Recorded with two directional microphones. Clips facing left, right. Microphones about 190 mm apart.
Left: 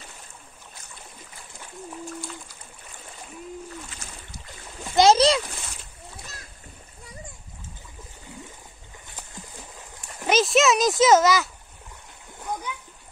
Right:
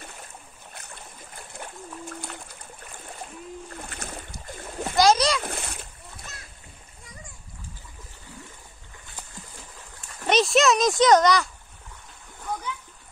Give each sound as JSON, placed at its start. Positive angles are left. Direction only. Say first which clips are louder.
{"t": 0.7, "sound": "a sound", "louder": "right 3 dB", "side_deg": -60}
{"t": 3.7, "sound": "splash", "louder": "right 3 dB", "side_deg": -55}
{"t": 4.9, "sound": "splash", "louder": "left 3 dB", "side_deg": 25}
{"t": 5.4, "sound": "splash", "louder": "right 5 dB", "side_deg": -55}
{"t": 10.2, "sound": "a child's voice", "louder": "even", "side_deg": 0}